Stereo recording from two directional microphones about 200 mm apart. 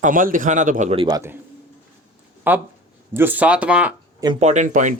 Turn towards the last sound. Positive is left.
turn(degrees=-40)  # may be behind; listen again after turning